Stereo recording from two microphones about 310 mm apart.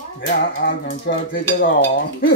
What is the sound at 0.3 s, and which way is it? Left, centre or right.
Cutlery, left.